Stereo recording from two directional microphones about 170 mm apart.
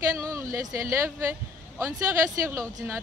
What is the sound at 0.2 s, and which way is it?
Speech, 20° right (ahead or behind).